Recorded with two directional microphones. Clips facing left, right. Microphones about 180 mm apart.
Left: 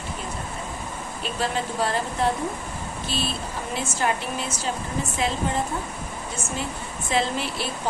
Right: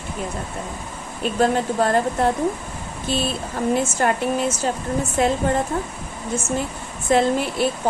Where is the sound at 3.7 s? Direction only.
50° right (ahead or behind).